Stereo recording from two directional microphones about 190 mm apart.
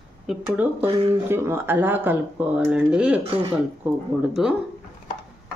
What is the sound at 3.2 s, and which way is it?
Speech, 30° right (ahead or behind).